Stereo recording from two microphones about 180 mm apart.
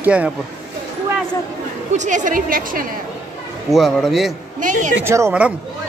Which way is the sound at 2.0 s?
45° right (ahead or behind).